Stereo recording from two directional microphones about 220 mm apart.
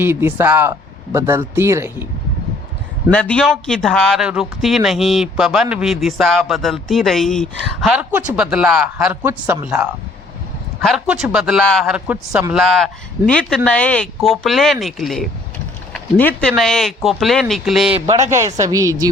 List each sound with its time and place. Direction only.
0.0 s speech: 10° right (ahead or behind)
3.1 s a man's voice: 5° left (ahead or behind)
17.9 s a man's voice: 20° right (ahead or behind)